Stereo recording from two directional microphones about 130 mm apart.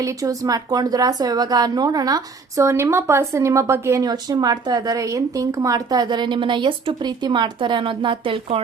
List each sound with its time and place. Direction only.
0.0 s speech: 25° right (ahead or behind)